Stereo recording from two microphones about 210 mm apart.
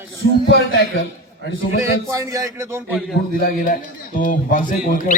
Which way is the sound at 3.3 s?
45° left (ahead or behind).